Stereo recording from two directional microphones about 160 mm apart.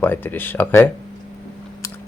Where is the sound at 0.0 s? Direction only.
10° left (ahead or behind).